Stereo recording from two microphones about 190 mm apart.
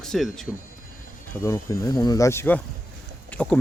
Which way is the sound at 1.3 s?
15° left (ahead or behind).